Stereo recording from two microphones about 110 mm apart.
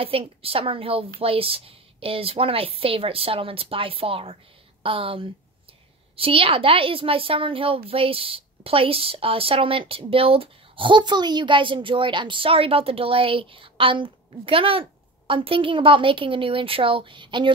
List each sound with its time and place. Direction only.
0.0 s a woman's voice: 60° right (ahead or behind)